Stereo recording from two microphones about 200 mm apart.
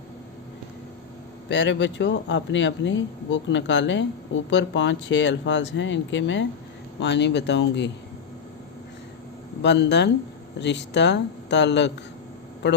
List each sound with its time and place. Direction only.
1.5 s speech: 65° left (ahead or behind)
9.6 s speech: 60° left (ahead or behind)